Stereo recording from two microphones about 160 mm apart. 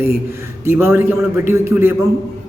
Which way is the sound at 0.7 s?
15° right (ahead or behind).